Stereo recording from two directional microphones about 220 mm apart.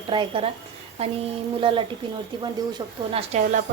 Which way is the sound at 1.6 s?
25° right (ahead or behind).